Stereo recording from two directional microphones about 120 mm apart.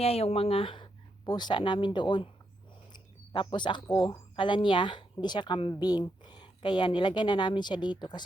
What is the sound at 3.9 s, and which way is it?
A woman's voice, 40° left (ahead or behind).